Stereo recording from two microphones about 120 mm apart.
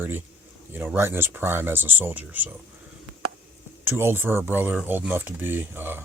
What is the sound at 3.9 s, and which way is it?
Speech, 20° right (ahead or behind).